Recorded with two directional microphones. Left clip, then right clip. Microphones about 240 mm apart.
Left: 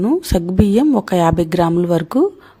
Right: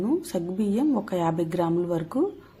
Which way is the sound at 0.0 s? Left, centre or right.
Left.